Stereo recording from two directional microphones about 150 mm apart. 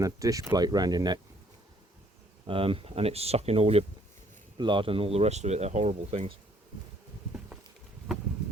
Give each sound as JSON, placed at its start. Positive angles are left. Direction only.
{"t": 0.0, "sound": "speech", "side_deg": -20}
{"t": 2.5, "sound": "speech", "side_deg": -35}